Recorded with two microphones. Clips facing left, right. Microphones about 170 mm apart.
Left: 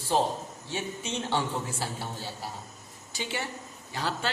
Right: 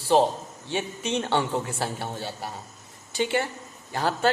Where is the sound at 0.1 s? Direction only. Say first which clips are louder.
Right 6 dB; 70° right (ahead or behind).